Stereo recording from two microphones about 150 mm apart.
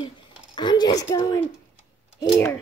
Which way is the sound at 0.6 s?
30° left (ahead or behind).